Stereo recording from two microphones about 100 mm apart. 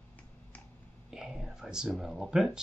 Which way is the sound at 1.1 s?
5° right (ahead or behind).